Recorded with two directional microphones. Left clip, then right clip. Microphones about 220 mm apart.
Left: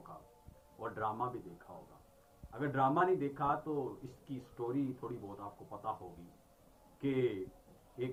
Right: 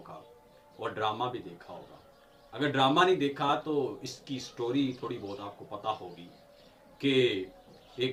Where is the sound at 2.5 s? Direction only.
45° right (ahead or behind).